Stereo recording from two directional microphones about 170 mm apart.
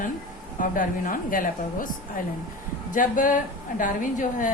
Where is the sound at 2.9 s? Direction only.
50° left (ahead or behind).